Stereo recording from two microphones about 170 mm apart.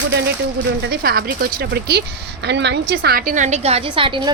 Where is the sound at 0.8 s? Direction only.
65° right (ahead or behind).